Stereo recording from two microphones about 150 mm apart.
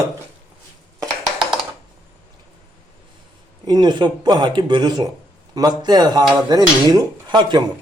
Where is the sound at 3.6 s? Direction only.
30° right (ahead or behind).